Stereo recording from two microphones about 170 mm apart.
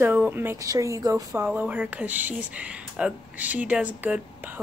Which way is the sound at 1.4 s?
10° right (ahead or behind).